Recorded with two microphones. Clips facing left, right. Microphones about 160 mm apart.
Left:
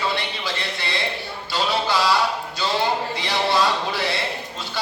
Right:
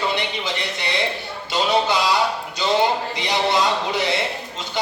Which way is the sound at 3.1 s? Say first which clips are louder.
Right 1 dB; 20° right (ahead or behind).